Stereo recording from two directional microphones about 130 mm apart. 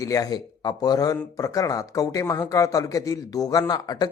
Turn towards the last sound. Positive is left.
turn(degrees=30)  # may be behind; listen again after turning